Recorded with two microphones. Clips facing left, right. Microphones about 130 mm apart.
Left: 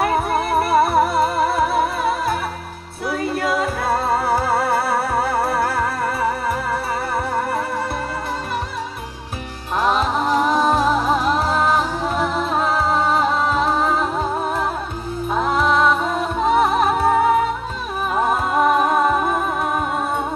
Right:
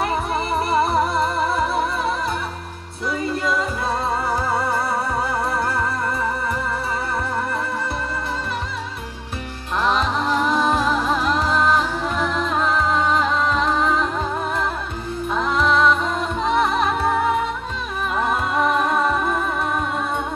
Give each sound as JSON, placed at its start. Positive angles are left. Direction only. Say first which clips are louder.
{"t": 0.7, "sound": "music", "louder": "left 3 dB", "side_deg": 5}
{"t": 3.3, "sound": "music", "louder": "left 3 dB", "side_deg": 65}
{"t": 10.1, "sound": "music", "louder": "left 2 dB", "side_deg": 40}
{"t": 11.5, "sound": "music", "louder": "right 2 dB", "side_deg": 5}
{"t": 12.2, "sound": "music", "louder": "left 1 dB", "side_deg": 40}
{"t": 15.8, "sound": "music", "louder": "left 1 dB", "side_deg": 5}
{"t": 16.4, "sound": "music", "louder": "left 3 dB", "side_deg": 45}
{"t": 18.3, "sound": "music", "louder": "left 3 dB", "side_deg": 5}